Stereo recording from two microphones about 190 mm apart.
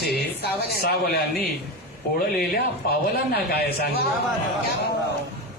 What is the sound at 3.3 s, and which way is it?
Speech, 55° left (ahead or behind).